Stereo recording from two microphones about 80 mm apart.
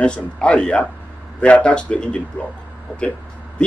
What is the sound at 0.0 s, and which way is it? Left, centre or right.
Speech, centre.